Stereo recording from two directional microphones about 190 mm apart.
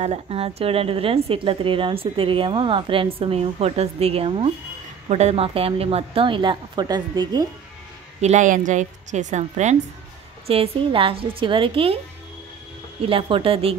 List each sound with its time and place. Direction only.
0.0 s a woman's voice: 35° right (ahead or behind)
8.2 s a woman's voice: 40° right (ahead or behind)
13.0 s a woman's voice: 30° right (ahead or behind)